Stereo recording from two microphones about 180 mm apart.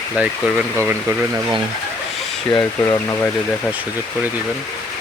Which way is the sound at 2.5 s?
20° left (ahead or behind).